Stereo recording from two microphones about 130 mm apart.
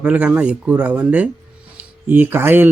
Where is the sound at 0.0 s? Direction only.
10° right (ahead or behind).